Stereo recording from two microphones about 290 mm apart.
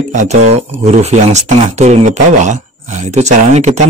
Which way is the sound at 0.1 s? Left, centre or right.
Right.